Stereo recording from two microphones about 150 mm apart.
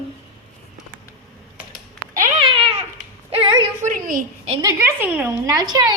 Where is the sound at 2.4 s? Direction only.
35° right (ahead or behind).